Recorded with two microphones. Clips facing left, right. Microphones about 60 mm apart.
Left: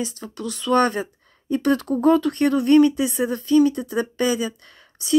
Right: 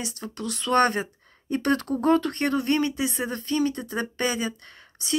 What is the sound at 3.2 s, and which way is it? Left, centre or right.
Speech, right.